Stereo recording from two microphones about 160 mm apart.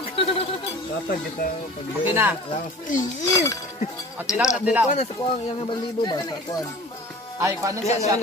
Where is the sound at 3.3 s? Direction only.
20° left (ahead or behind).